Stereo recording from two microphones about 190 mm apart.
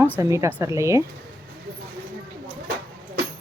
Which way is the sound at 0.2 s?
15° right (ahead or behind).